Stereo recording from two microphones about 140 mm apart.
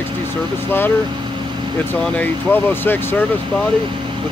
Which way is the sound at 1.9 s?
15° left (ahead or behind).